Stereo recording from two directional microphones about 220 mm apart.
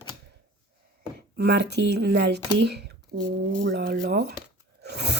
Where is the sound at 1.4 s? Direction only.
50° right (ahead or behind).